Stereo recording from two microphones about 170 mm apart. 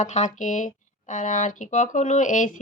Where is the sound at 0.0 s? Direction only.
45° left (ahead or behind).